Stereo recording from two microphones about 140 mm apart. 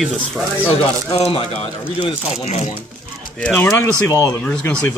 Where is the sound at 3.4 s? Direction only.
15° left (ahead or behind).